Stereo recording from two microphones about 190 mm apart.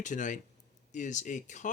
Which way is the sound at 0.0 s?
40° left (ahead or behind).